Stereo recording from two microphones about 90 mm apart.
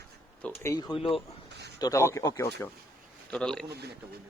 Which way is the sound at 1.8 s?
35° left (ahead or behind).